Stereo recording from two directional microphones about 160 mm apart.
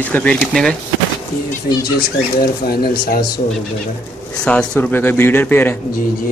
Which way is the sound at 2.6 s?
70° left (ahead or behind).